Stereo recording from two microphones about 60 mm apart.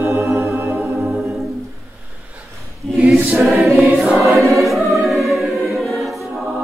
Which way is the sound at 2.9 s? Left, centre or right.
Centre.